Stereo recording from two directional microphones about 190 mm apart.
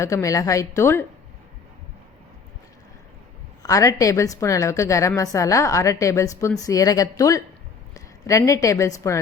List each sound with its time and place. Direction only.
0.0 s a woman's voice: 15° left (ahead or behind)
3.6 s a woman's voice: 15° left (ahead or behind)